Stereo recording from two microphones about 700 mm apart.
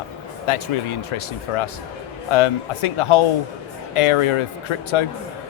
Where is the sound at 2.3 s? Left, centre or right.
Left.